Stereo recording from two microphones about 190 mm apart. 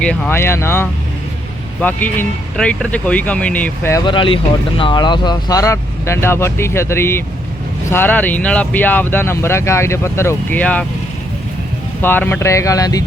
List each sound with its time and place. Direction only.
0.0 s speech: 5° left (ahead or behind)
4.0 s speech: 25° left (ahead or behind); by 10.8 s 5° left (ahead or behind)
12.0 s speech: 10° left (ahead or behind)